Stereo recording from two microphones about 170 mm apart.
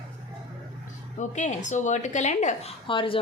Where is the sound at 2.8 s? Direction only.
30° left (ahead or behind).